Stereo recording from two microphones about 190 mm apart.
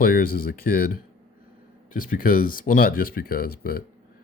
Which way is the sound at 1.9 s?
45° left (ahead or behind).